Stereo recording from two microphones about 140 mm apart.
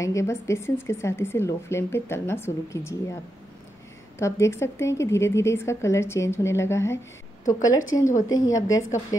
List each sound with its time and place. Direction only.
0.0 s speech: 20° left (ahead or behind)
4.2 s speech: 20° left (ahead or behind)